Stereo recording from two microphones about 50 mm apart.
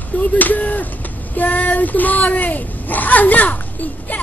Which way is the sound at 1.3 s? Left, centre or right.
Left.